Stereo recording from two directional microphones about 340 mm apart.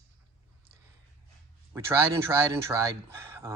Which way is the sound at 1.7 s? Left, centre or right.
Centre.